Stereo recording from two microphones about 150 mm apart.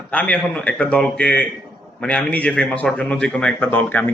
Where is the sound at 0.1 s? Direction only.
10° left (ahead or behind).